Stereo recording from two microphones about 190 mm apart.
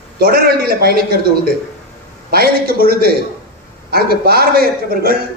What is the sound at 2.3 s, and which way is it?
Speech, 55° right (ahead or behind).